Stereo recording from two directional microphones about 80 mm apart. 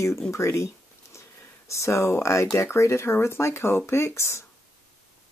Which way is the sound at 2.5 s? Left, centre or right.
Left.